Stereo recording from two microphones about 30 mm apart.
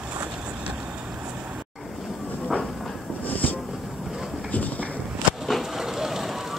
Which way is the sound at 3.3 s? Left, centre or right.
Left.